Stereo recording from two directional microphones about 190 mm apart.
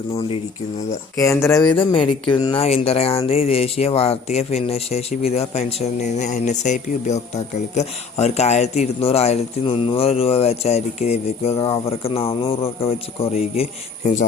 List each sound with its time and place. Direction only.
0.1 s speech: 30° left (ahead or behind)
1.2 s speech: 15° left (ahead or behind); by 14.3 s 40° left (ahead or behind)